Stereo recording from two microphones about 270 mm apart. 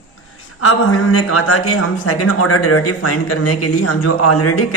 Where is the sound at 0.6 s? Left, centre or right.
Left.